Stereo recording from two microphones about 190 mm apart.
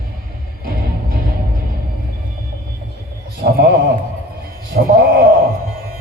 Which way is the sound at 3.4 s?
55° right (ahead or behind).